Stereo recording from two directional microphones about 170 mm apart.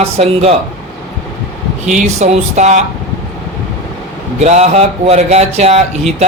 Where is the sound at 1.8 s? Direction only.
40° right (ahead or behind).